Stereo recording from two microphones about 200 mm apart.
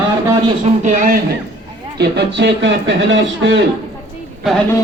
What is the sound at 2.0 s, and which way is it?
Speech, 55° right (ahead or behind).